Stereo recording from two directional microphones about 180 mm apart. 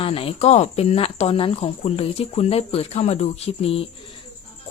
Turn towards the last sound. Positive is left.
turn(degrees=35)  # may be behind; listen again after turning